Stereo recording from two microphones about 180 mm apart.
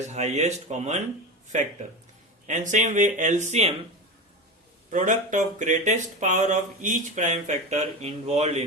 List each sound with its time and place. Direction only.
0.1 s speech: 40° right (ahead or behind)
4.9 s speech: 45° right (ahead or behind)